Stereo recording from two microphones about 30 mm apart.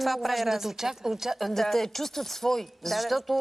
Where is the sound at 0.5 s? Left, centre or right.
Centre.